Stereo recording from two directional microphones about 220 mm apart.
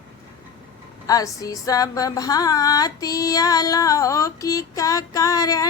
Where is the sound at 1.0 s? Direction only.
15° left (ahead or behind).